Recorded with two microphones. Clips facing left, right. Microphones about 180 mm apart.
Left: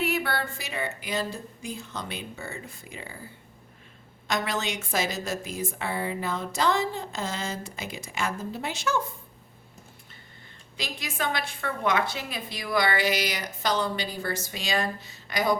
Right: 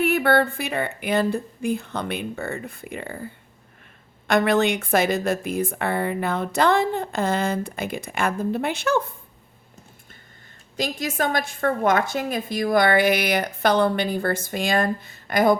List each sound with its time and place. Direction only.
0.0 s a woman's voice: 55° right (ahead or behind)
4.3 s a woman's voice: 60° right (ahead or behind)
10.8 s a woman's voice: 45° right (ahead or behind)